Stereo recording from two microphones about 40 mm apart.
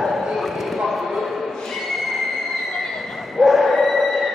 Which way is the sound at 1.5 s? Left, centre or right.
Centre.